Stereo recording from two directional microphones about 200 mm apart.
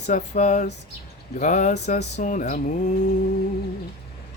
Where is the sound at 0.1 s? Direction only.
35° left (ahead or behind).